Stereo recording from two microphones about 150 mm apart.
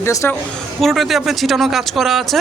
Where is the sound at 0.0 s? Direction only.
20° left (ahead or behind).